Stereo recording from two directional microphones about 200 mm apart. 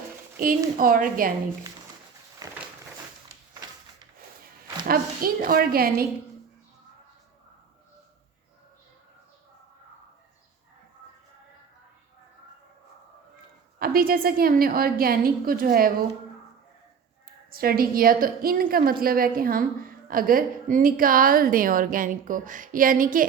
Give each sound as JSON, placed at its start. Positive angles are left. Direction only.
{"t": 0.3, "sound": "a woman's voice", "side_deg": -45}
{"t": 4.9, "sound": "a woman's voice", "side_deg": -45}
{"t": 13.7, "sound": "a woman's voice", "side_deg": -50}
{"t": 17.2, "sound": "a woman's voice", "side_deg": -50}